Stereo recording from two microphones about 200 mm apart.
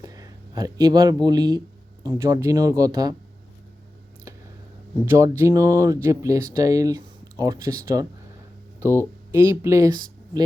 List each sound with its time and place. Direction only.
0.0 s speech: 20° right (ahead or behind)
5.0 s speech: 15° right (ahead or behind)
9.3 s speech: 15° right (ahead or behind)